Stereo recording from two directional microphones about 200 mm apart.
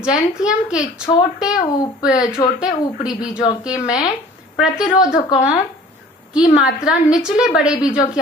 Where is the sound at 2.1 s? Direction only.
20° left (ahead or behind).